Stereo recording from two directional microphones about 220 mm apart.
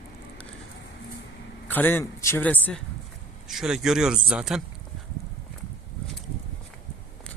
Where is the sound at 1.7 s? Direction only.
10° left (ahead or behind).